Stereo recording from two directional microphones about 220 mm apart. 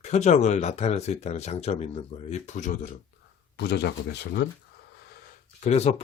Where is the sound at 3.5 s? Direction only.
50° left (ahead or behind).